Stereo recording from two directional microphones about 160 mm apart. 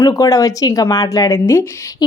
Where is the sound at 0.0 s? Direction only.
20° left (ahead or behind).